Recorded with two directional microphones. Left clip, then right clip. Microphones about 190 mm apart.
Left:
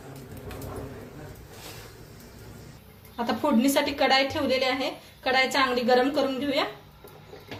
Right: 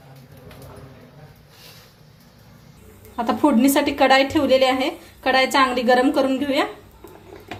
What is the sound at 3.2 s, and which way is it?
A woman's voice, 45° right (ahead or behind).